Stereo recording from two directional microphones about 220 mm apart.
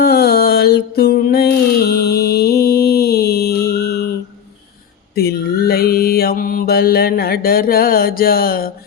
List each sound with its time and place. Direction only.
0.0 s music: 45° left (ahead or behind)
5.1 s mantra: 45° left (ahead or behind)